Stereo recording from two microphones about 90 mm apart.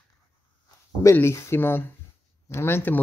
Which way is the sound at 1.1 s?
30° left (ahead or behind).